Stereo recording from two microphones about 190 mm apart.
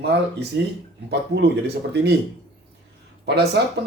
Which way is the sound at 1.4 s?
60° right (ahead or behind).